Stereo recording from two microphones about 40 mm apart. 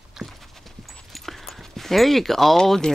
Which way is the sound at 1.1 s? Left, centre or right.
Centre.